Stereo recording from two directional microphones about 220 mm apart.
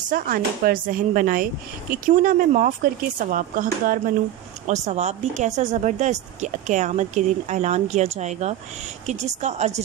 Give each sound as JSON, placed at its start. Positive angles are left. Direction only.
{"t": 0.1, "sound": "a woman's voice", "side_deg": -40}